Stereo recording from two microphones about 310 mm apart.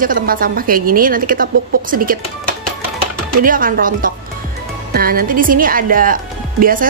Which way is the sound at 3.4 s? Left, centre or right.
Right.